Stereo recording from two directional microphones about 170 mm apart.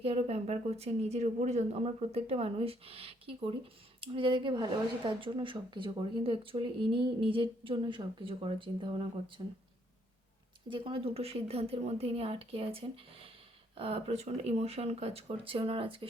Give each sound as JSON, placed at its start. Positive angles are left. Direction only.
{"t": 0.0, "sound": "speech", "side_deg": -35}
{"t": 10.7, "sound": "speech", "side_deg": -30}